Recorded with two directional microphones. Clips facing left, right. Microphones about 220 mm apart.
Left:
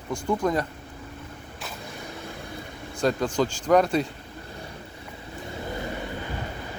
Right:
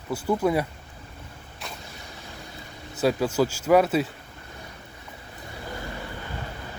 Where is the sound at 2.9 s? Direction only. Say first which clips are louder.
Right 1 dB; 5° right (ahead or behind).